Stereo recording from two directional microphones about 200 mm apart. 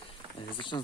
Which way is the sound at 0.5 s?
25° left (ahead or behind).